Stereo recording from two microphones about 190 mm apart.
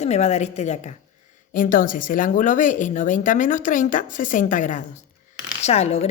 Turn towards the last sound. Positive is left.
turn(degrees=35)  # may be behind; listen again after turning